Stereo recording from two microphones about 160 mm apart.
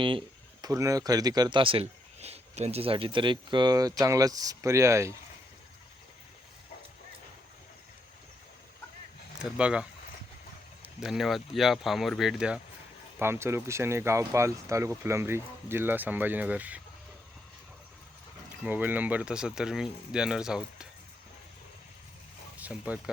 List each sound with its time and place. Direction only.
0.0 s a sound: 30° right (ahead or behind)
0.7 s speech: 20° right (ahead or behind)
9.4 s speech: 5° right (ahead or behind)
10.8 s speech: 5° right (ahead or behind)
13.1 s speech: 15° right (ahead or behind)
18.6 s speech: 10° right (ahead or behind)
22.5 s speech: 10° right (ahead or behind)